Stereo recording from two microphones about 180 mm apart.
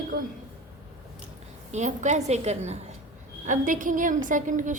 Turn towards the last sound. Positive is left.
turn(degrees=-45)  # may be behind; listen again after turning